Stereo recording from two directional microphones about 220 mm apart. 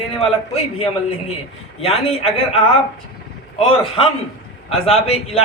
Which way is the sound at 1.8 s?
25° left (ahead or behind).